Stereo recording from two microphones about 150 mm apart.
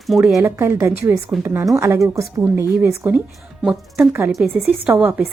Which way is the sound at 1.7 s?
20° right (ahead or behind).